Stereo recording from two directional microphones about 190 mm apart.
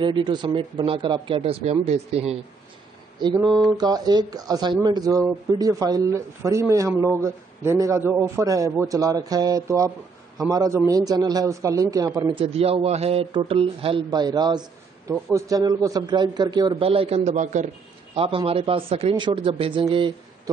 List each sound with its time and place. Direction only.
0.0 s a man's voice: 25° right (ahead or behind)
3.2 s a man's voice: 25° right (ahead or behind); by 17.6 s 40° right (ahead or behind)
18.1 s a man's voice: 30° right (ahead or behind)